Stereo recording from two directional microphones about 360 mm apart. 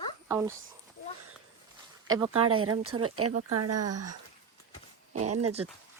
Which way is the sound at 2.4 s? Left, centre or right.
Right.